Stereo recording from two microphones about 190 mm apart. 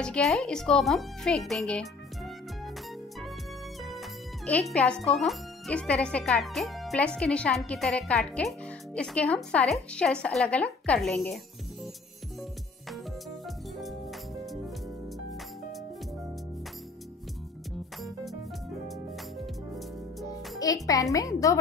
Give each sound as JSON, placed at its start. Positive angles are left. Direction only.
{"t": 0.0, "sound": "speech", "side_deg": 5}
{"t": 4.5, "sound": "speech", "side_deg": 5}
{"t": 20.5, "sound": "a child's voice", "side_deg": 20}